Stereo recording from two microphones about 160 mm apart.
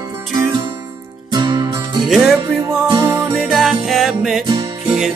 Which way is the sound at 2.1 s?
Centre (ahead or behind).